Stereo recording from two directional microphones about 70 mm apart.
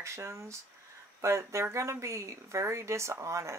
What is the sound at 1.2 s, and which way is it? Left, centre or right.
Speech, right.